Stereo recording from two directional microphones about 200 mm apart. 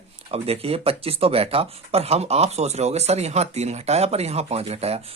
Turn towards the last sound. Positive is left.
turn(degrees=-30)  # may be behind; listen again after turning